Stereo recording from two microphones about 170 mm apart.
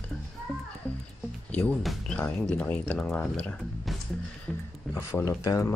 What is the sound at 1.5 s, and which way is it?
Speech, 5° left (ahead or behind).